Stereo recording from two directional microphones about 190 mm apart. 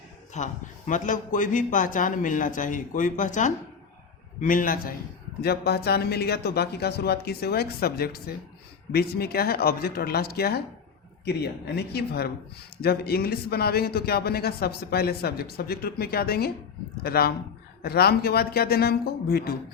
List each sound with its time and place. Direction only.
0.3 s a man's voice: 40° left (ahead or behind)
5.4 s speech: 55° left (ahead or behind)